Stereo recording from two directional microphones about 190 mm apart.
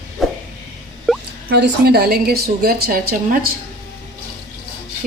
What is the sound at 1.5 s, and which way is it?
A woman's voice, 60° right (ahead or behind).